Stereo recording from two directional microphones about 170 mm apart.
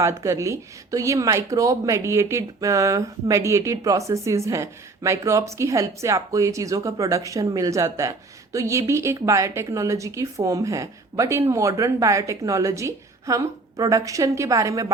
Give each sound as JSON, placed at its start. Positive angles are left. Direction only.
{"t": 0.2, "sound": "a woman's voice", "side_deg": -15}